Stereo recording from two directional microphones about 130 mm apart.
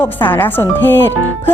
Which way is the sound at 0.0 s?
15° left (ahead or behind).